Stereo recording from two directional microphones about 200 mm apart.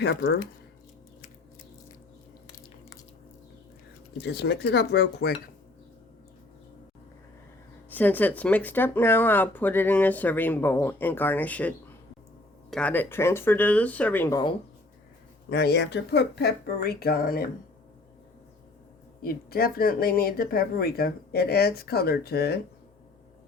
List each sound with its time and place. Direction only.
0.0 s speech: 55° left (ahead or behind)
4.2 s speech: 55° left (ahead or behind)
7.9 s speech: 10° left (ahead or behind)
12.7 s speech: 10° left (ahead or behind)
15.4 s speech: 55° left (ahead or behind)
19.2 s speech: 50° left (ahead or behind)